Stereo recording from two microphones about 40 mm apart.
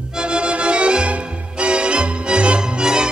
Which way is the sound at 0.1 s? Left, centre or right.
Right.